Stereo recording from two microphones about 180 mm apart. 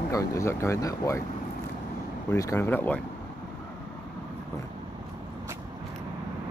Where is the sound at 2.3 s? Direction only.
15° left (ahead or behind).